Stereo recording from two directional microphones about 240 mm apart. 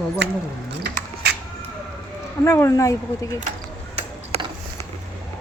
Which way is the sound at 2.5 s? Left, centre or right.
Centre.